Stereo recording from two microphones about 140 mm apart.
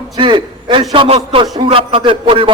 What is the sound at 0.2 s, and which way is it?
A man's voice, 35° right (ahead or behind).